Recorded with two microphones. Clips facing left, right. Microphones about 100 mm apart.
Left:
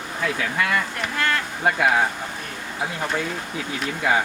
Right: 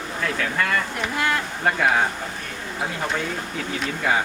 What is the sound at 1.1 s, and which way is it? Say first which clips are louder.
Speech: even; 15° right (ahead or behind).